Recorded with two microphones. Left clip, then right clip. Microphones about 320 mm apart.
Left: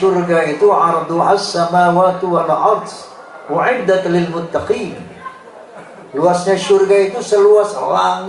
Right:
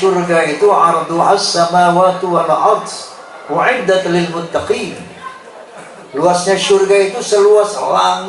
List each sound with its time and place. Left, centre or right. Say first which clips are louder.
0.1 s a man's voice: right 1 dB; centre
6.1 s a man's voice: right 1 dB; centre
6.6 s a man's voice: right 1 dB; centre